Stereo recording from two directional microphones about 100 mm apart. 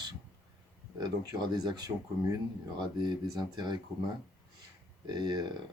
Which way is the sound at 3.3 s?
45° right (ahead or behind).